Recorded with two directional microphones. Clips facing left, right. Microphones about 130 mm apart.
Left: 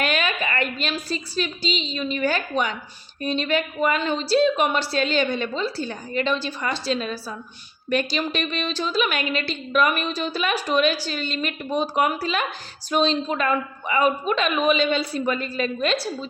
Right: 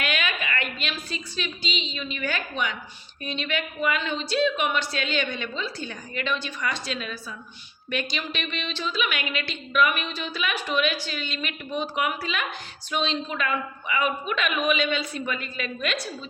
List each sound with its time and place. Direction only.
0.0 s a woman's voice: 35° left (ahead or behind)